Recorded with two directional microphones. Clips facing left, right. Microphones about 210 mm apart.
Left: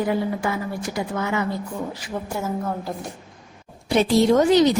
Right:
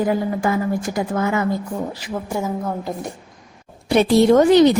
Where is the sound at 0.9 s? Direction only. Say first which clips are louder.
Right 2 dB; 45° right (ahead or behind).